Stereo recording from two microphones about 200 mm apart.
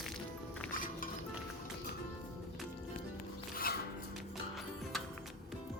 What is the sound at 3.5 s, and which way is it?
Music, 50° left (ahead or behind).